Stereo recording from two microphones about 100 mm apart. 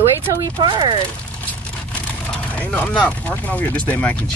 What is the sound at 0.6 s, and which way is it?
Speech, 50° right (ahead or behind).